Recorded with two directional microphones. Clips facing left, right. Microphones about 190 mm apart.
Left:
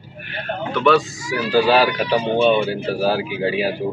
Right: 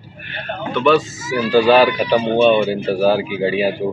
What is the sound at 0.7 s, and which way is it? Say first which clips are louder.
Speech: right 2 dB; centre (ahead or behind).